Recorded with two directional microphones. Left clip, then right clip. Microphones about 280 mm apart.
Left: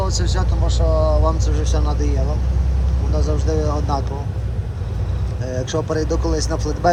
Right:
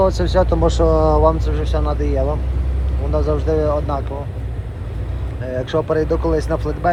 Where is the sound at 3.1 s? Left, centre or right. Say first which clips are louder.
Right 5 dB; centre.